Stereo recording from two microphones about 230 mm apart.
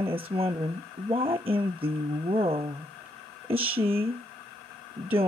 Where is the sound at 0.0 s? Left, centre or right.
Right.